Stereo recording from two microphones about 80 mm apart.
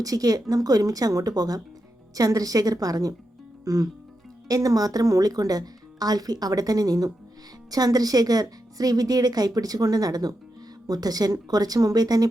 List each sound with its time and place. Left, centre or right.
0.0 s speech: right
3.6 s music: right
4.4 s speech: right